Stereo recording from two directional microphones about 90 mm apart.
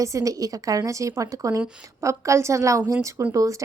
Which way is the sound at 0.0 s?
35° right (ahead or behind).